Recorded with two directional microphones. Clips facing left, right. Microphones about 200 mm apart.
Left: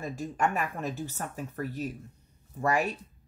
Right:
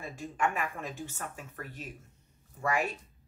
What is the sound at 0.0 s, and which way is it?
A woman's voice, 40° left (ahead or behind).